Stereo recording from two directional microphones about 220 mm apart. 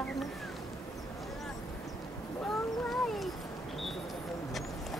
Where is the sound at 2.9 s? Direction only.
Centre (ahead or behind).